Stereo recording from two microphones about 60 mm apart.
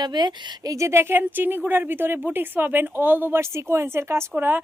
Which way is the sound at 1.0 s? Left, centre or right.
Right.